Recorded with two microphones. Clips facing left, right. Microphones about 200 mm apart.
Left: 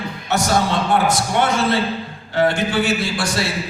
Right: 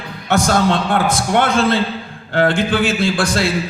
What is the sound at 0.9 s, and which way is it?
A man's voice, 55° right (ahead or behind).